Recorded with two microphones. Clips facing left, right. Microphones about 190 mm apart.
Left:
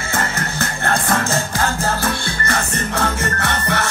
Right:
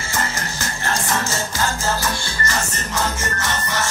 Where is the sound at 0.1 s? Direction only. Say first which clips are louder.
Left 3 dB; 55° left (ahead or behind).